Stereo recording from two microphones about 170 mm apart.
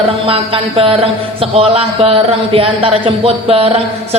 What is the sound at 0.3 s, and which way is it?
Speech, 35° right (ahead or behind).